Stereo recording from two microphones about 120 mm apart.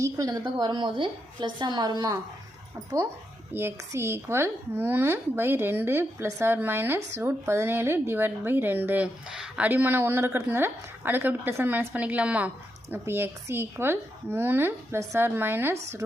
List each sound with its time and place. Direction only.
0.0 s a woman's voice: 30° right (ahead or behind)
3.5 s speech: 20° right (ahead or behind)